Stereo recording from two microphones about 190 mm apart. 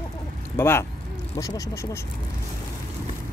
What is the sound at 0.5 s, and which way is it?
Speech, 10° left (ahead or behind).